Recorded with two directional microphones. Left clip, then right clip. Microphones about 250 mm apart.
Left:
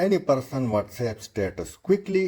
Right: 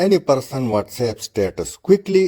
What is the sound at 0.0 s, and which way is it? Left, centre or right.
Speech, right.